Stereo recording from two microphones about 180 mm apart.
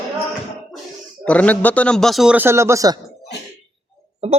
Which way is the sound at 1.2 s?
10° left (ahead or behind).